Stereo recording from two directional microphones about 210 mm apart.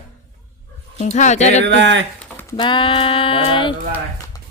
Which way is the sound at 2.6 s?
20° left (ahead or behind).